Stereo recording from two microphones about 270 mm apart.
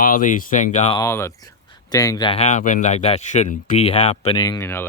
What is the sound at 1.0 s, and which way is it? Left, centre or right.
Speech, centre.